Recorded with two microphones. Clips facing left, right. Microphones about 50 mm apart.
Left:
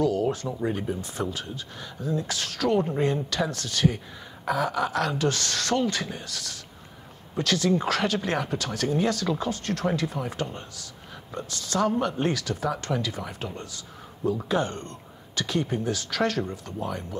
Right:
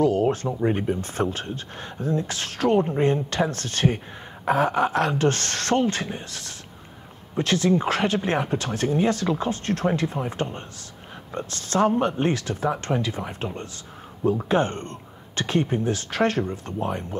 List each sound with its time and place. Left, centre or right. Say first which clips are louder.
0.0 s speech: right 4 dB; right